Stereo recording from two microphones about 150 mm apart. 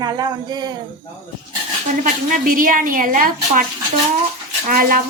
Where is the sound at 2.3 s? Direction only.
65° right (ahead or behind).